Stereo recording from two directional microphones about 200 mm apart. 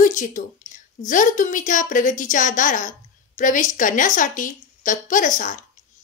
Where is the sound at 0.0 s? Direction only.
40° left (ahead or behind).